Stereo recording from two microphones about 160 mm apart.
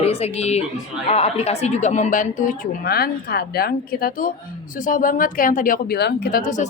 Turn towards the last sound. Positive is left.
turn(degrees=55)  # may be behind; listen again after turning